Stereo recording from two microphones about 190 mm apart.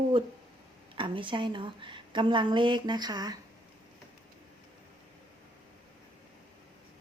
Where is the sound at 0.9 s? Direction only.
25° right (ahead or behind).